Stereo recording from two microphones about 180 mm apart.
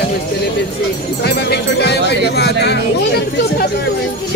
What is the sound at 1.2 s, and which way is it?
Speech, 65° left (ahead or behind).